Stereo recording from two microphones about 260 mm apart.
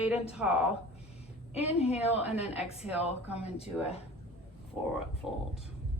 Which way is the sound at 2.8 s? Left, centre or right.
Centre.